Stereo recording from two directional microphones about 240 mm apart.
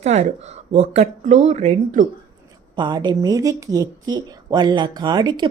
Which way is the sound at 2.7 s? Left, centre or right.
Centre.